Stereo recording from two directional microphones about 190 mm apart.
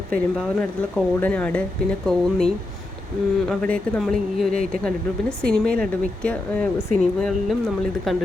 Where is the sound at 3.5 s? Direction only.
5° left (ahead or behind).